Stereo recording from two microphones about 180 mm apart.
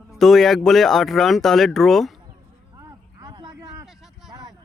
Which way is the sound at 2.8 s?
20° right (ahead or behind).